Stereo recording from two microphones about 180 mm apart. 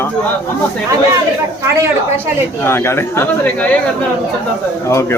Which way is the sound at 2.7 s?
15° left (ahead or behind).